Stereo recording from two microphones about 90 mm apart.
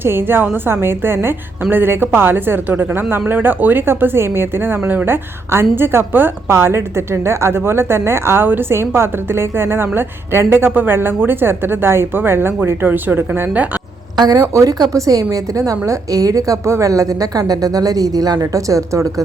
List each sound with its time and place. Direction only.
0.0 s a woman's voice: 25° right (ahead or behind)
14.2 s a woman's voice: 45° right (ahead or behind)